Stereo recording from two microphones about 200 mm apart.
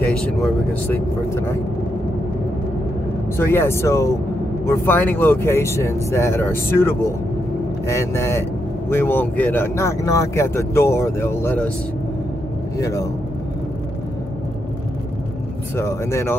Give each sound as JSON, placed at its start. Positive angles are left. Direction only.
{"t": 0.2, "sound": "speech", "side_deg": 5}
{"t": 3.3, "sound": "speech", "side_deg": 10}
{"t": 12.7, "sound": "speech", "side_deg": 15}
{"t": 15.7, "sound": "speech", "side_deg": 15}